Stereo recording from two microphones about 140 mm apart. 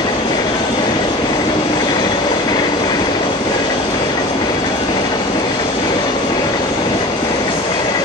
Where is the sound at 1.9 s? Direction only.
30° left (ahead or behind).